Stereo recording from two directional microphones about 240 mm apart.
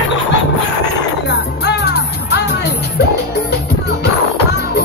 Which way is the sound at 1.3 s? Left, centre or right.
Left.